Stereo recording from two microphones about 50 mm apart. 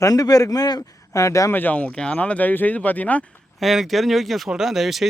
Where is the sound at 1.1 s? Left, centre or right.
Left.